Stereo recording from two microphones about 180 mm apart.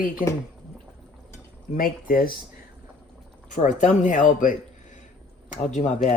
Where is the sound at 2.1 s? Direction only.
50° left (ahead or behind).